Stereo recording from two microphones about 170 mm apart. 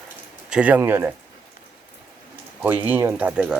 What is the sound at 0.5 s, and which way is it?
Speech, 10° right (ahead or behind).